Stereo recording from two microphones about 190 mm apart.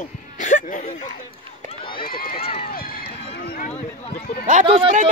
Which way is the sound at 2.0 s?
50° left (ahead or behind).